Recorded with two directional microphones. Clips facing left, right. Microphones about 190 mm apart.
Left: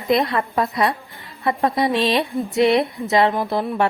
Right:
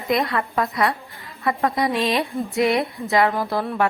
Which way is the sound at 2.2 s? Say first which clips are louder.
Left 3 dB; 20° left (ahead or behind).